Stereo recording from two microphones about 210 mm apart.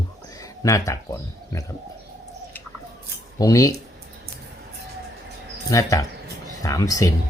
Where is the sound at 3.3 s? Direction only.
15° left (ahead or behind).